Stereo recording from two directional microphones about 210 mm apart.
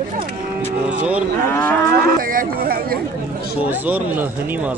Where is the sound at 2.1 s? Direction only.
40° right (ahead or behind).